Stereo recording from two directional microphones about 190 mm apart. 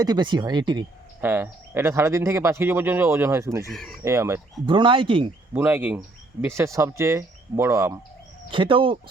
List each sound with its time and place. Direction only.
0.0 s speech: 20° right (ahead or behind)
1.2 s speech: 10° right (ahead or behind)
3.7 s speech: centre (ahead or behind)
4.0 s speech: 15° right (ahead or behind)
4.6 s speech: 25° right (ahead or behind)
5.5 s speech: 10° right (ahead or behind)
8.4 s speech: 25° right (ahead or behind)